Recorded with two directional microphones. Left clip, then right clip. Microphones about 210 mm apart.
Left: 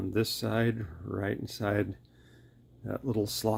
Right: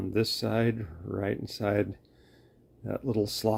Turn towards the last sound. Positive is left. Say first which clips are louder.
# right 2 dB
turn(degrees=-10)  # may be behind; listen again after turning